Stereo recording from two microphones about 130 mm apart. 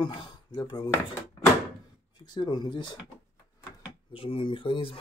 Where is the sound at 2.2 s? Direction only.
35° left (ahead or behind).